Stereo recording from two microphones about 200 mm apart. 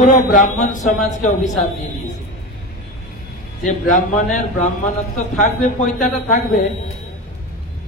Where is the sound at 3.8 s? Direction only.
40° left (ahead or behind).